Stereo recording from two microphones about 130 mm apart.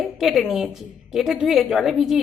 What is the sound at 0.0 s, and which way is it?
A woman's voice, 5° right (ahead or behind).